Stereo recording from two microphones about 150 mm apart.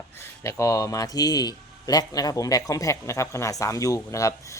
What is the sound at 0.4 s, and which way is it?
A man's voice, 20° left (ahead or behind).